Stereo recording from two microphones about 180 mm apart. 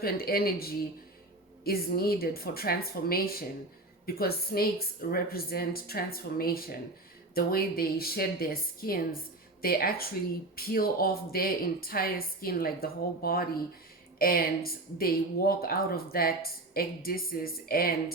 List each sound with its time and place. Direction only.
0.0 s a woman's voice: 55° left (ahead or behind)